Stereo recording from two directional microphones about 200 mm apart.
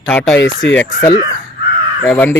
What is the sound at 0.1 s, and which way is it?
Speech, 10° left (ahead or behind).